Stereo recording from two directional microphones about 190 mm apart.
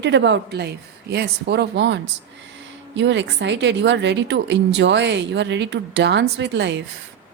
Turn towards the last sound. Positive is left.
turn(degrees=-65)  # may be behind; listen again after turning